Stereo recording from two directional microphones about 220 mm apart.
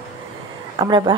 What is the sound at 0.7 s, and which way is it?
Speech, 20° right (ahead or behind).